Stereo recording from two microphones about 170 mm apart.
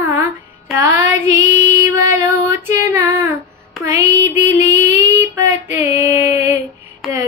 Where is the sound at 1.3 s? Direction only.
45° left (ahead or behind).